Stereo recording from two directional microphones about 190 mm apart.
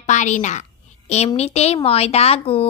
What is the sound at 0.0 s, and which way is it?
A woman's voice, 40° left (ahead or behind).